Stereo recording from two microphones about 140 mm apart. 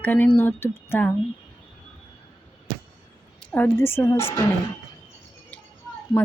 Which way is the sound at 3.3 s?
10° left (ahead or behind).